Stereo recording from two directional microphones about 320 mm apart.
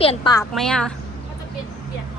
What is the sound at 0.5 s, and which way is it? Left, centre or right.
Speech, centre.